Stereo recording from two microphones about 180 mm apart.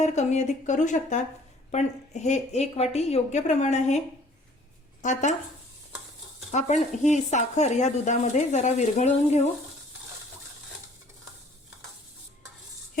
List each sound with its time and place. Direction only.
0.0 s speech: 40° left (ahead or behind)
5.0 s speech: 45° left (ahead or behind)
6.5 s speech: 40° left (ahead or behind)